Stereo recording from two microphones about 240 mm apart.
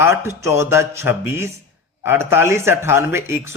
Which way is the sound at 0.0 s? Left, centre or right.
Centre.